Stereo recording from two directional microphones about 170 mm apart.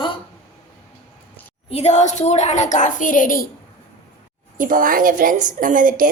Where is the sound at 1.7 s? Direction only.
40° left (ahead or behind).